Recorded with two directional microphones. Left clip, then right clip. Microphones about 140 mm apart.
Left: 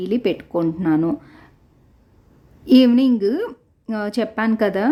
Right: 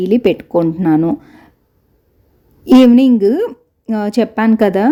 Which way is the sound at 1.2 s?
25° right (ahead or behind).